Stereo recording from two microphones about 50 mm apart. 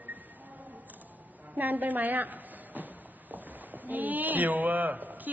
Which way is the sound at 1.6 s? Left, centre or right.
Right.